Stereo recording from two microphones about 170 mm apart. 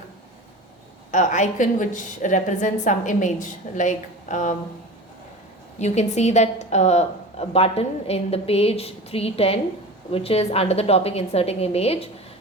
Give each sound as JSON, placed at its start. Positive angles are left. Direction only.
{"t": 1.1, "sound": "a woman's voice", "side_deg": 45}
{"t": 5.8, "sound": "a woman's voice", "side_deg": 40}